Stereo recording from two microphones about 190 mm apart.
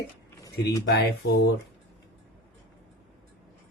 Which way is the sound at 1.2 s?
65° left (ahead or behind).